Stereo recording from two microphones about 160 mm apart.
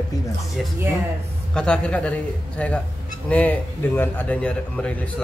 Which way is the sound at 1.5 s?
5° left (ahead or behind).